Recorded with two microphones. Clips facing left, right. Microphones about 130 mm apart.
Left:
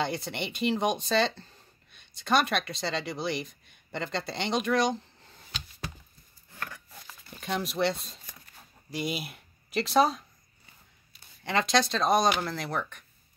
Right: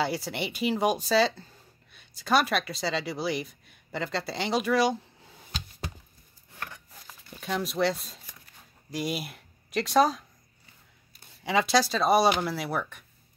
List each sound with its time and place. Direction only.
0.0 s speech: 5° right (ahead or behind)
6.6 s a sound: 20° right (ahead or behind)
7.2 s speech: centre (ahead or behind)
11.4 s speech: 5° right (ahead or behind)